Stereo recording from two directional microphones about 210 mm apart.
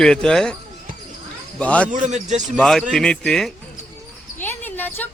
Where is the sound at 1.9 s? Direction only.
35° right (ahead or behind).